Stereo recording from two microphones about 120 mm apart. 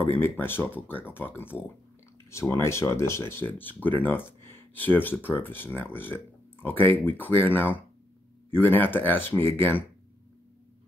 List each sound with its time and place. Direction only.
0.2 s speech: 15° left (ahead or behind)